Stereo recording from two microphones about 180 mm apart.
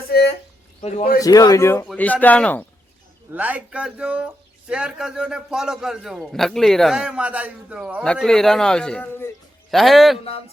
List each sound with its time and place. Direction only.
0.1 s a sound: 65° left (ahead or behind)
0.8 s a man's voice: 35° left (ahead or behind)
1.2 s a man's voice: 20° left (ahead or behind)
3.3 s a man's voice: 10° right (ahead or behind)
8.0 s a man's voice: 5° left (ahead or behind)